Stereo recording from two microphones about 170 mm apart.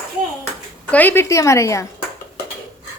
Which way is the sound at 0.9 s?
10° left (ahead or behind).